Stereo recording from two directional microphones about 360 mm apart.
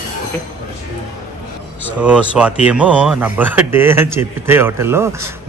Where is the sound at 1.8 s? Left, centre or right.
Centre.